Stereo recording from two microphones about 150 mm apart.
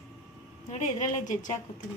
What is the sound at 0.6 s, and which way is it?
Speech, 50° left (ahead or behind).